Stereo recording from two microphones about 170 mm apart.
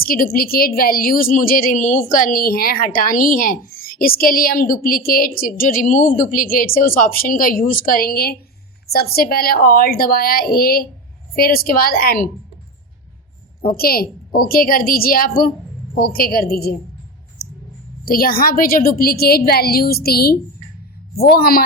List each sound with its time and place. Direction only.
0.0 s a woman's voice: 60° left (ahead or behind)
13.7 s a woman's voice: 60° left (ahead or behind)
17.4 s a sound: 65° left (ahead or behind)
18.0 s a woman's voice: 60° left (ahead or behind)